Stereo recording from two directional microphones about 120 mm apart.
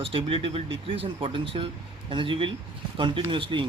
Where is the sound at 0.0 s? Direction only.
50° right (ahead or behind).